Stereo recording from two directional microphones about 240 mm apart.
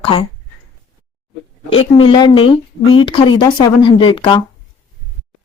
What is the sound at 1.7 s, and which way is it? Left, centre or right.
Speech, left.